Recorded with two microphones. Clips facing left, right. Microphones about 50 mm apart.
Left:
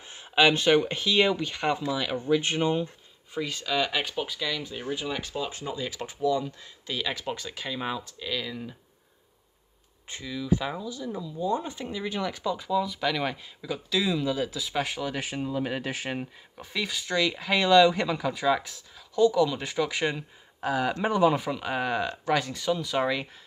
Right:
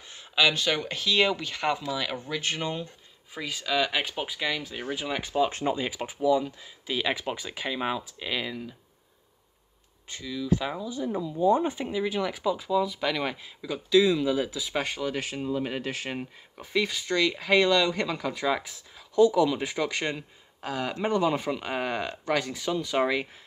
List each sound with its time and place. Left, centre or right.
0.1 s a sound: left
0.7 s speech: centre
2.1 s speech: centre
3.3 s speech: centre
4.1 s speech: centre
5.5 s speech: right
5.9 s speech: centre
10.2 s speech: centre
10.9 s speech: right
12.0 s speech: centre
16.2 s speech: centre
19.9 s speech: centre